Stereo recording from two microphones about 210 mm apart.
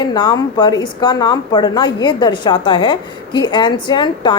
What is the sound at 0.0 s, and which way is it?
A woman's voice, 20° left (ahead or behind).